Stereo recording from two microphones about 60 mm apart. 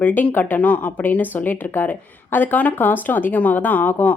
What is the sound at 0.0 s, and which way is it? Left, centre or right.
A woman's voice, left.